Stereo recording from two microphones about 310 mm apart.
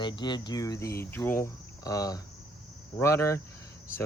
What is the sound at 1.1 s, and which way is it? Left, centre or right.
Cricket, centre.